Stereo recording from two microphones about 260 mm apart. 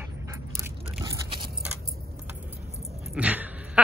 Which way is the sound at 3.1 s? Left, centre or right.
Centre.